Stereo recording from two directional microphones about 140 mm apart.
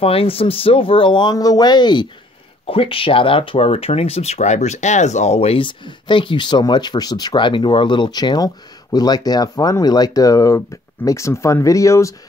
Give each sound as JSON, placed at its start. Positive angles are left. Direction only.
{"t": 0.0, "sound": "speech", "side_deg": 40}